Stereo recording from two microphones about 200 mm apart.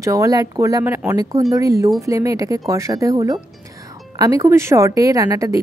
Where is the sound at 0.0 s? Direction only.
15° right (ahead or behind).